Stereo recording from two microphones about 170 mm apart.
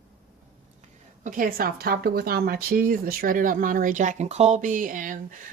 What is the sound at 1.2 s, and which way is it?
A woman's voice, 50° right (ahead or behind).